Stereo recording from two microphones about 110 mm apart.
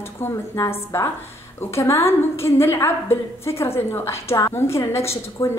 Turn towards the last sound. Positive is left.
turn(degrees=25)  # may be behind; listen again after turning